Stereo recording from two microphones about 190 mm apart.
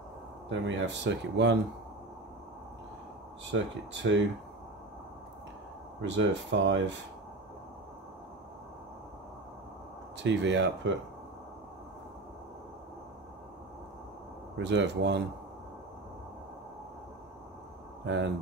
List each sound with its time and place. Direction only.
0.5 s speech: 70° right (ahead or behind)
3.5 s speech: 75° right (ahead or behind)
6.0 s speech: 70° right (ahead or behind)
10.1 s speech: 70° right (ahead or behind)
14.6 s speech: 65° right (ahead or behind)
18.0 s speech: 70° right (ahead or behind)